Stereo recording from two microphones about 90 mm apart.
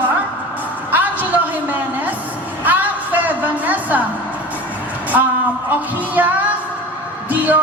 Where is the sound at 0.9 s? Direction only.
20° right (ahead or behind).